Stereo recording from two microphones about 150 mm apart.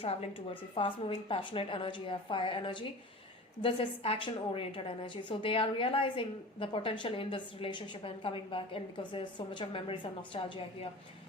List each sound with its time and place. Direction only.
0.0 s a woman's voice: 40° left (ahead or behind)